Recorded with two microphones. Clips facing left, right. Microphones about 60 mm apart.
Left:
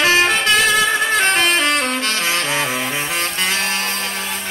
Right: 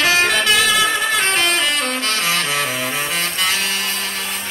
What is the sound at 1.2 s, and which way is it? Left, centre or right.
Music, left.